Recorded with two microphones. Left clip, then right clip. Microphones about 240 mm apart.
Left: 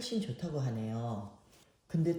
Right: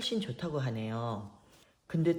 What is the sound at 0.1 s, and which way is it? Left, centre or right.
Speech, centre.